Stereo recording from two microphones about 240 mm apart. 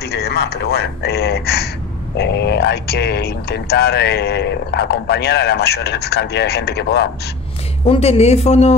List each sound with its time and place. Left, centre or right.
0.0 s speech: left
7.8 s speech: left